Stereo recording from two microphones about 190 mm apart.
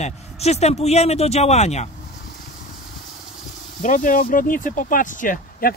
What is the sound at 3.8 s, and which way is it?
Speech, 40° left (ahead or behind).